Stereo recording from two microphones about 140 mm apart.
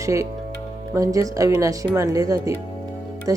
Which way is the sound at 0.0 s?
20° right (ahead or behind).